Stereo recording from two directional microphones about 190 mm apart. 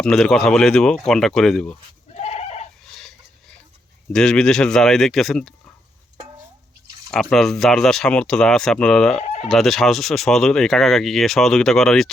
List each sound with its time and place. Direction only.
0.0 s speech: 5° left (ahead or behind)
2.1 s goat: 35° left (ahead or behind)
2.9 s a sound: centre (ahead or behind)
4.1 s speech: 5° left (ahead or behind)
7.1 s speech: 5° left (ahead or behind)
9.1 s speech: 35° left (ahead or behind)
9.5 s speech: centre (ahead or behind)